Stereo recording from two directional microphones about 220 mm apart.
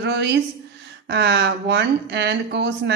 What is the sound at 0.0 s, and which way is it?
Speech, 50° right (ahead or behind).